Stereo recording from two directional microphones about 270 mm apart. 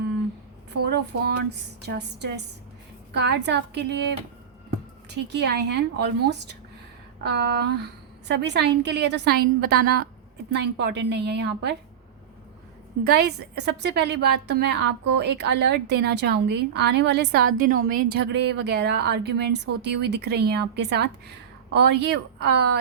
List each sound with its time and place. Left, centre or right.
0.9 s a woman's voice: right
7.2 s a woman's voice: right
13.1 s a woman's voice: right